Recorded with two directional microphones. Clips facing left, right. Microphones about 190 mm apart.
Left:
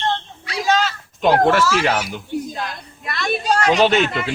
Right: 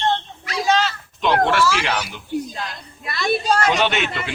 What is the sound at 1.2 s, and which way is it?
Speech, 45° left (ahead or behind).